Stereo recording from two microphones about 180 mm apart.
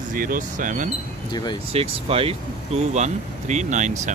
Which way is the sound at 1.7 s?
35° right (ahead or behind).